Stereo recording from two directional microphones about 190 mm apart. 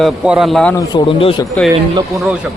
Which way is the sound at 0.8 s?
25° left (ahead or behind).